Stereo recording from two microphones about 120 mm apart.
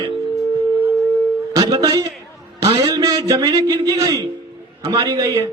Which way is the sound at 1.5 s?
30° right (ahead or behind).